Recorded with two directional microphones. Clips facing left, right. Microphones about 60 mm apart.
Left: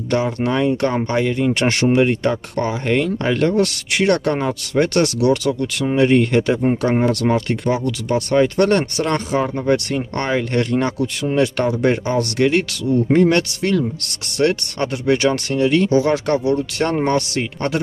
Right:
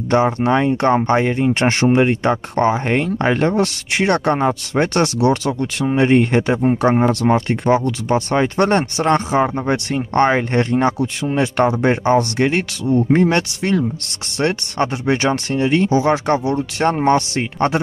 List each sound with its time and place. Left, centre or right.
0.1 s speech: right